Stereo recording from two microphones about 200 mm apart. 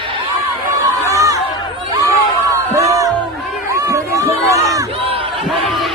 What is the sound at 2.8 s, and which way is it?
Music, 15° right (ahead or behind).